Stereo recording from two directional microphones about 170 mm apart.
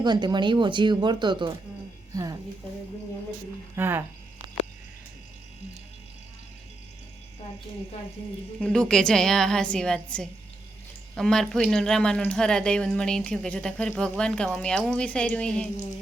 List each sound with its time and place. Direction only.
0.0 s speech: 25° right (ahead or behind)
2.1 s a sound: 20° right (ahead or behind)
3.8 s speech: 15° right (ahead or behind)
8.6 s a woman's voice: 5° left (ahead or behind)